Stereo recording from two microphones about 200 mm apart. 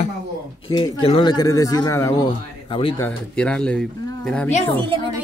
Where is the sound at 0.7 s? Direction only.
25° left (ahead or behind).